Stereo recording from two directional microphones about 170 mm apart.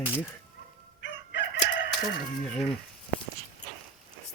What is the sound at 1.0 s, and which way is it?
Crowing, 90° left.